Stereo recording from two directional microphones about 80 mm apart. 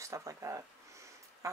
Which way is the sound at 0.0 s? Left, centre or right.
Right.